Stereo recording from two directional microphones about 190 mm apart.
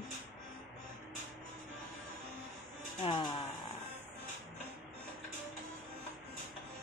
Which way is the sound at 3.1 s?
25° left (ahead or behind).